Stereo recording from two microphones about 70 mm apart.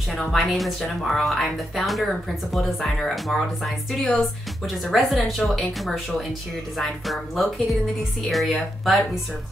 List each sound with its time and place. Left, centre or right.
0.3 s speech: centre